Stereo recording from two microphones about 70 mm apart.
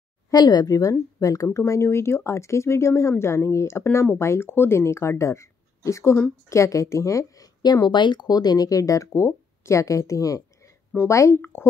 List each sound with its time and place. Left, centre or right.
0.3 s speech: left
1.6 s speech: left
7.6 s speech: left